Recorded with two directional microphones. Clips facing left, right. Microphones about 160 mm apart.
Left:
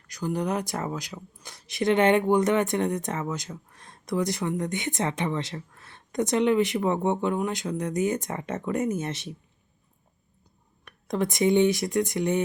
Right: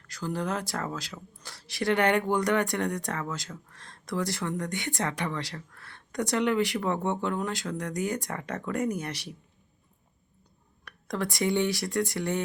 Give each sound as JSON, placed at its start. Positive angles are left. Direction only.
{"t": 0.1, "sound": "speech", "side_deg": 15}
{"t": 10.8, "sound": "speech", "side_deg": 20}